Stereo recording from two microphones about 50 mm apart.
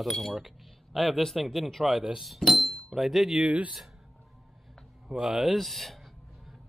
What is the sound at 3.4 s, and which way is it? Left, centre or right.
Speech, right.